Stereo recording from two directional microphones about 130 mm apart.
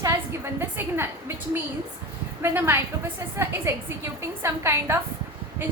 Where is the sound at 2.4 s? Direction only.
20° right (ahead or behind).